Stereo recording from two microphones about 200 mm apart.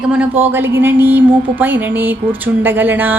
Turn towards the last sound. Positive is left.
turn(degrees=-10)  # may be behind; listen again after turning